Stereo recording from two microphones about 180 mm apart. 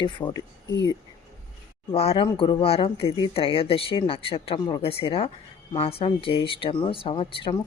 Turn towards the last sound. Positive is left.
turn(degrees=30)  # may be behind; listen again after turning